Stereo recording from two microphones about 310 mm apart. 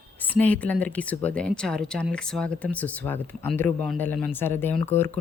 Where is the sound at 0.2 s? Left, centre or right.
Centre.